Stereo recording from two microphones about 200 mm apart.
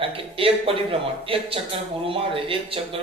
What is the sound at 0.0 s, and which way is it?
A man's voice, 25° right (ahead or behind).